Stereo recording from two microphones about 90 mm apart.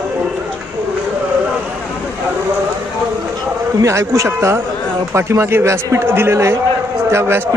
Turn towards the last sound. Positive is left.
turn(degrees=-25)  # may be behind; listen again after turning